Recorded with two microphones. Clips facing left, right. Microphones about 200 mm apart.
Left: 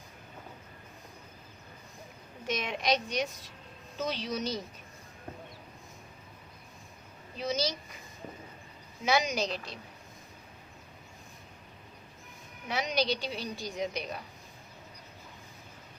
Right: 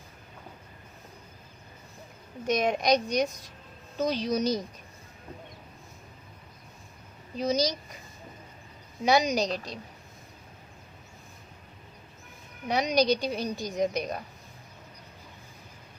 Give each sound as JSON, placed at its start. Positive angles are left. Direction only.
{"t": 2.5, "sound": "a woman's voice", "side_deg": -45}
{"t": 7.3, "sound": "a woman's voice", "side_deg": -40}
{"t": 9.0, "sound": "a woman's voice", "side_deg": -40}
{"t": 12.6, "sound": "a woman's voice", "side_deg": -40}